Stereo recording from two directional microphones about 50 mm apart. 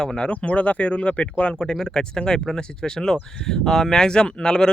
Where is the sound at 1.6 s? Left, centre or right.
Centre.